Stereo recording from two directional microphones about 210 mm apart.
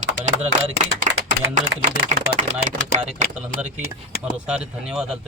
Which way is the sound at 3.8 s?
45° left (ahead or behind).